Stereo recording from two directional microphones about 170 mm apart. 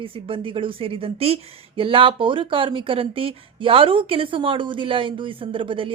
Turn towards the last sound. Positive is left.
turn(degrees=-30)  # may be behind; listen again after turning